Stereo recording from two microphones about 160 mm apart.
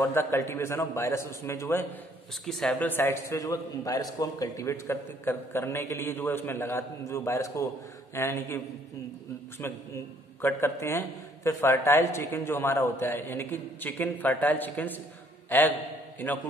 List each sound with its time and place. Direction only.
0.0 s a man's voice: 15° left (ahead or behind)
2.4 s a man's voice: 5° left (ahead or behind)